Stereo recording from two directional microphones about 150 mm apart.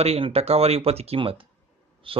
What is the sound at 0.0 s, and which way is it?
Speech, 40° right (ahead or behind).